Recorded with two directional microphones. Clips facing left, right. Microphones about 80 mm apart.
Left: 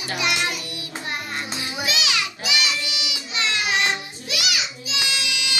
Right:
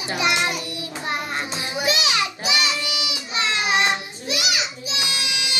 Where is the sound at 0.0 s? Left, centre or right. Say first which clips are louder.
Right 3 dB; right.